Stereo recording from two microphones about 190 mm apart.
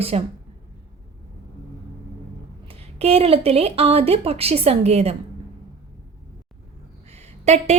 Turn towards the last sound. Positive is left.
turn(degrees=-35)  # may be behind; listen again after turning